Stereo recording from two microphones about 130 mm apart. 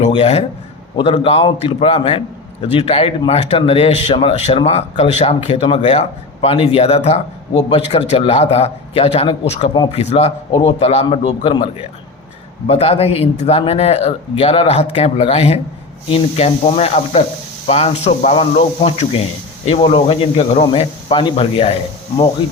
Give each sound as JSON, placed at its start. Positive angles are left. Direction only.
{"t": 0.2, "sound": "a man's voice", "side_deg": 55}
{"t": 12.6, "sound": "a man's voice", "side_deg": 50}